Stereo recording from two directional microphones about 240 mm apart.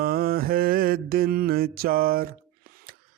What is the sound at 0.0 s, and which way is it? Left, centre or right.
Mantra, right.